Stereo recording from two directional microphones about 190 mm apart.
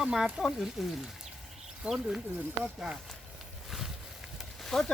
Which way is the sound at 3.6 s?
Centre (ahead or behind).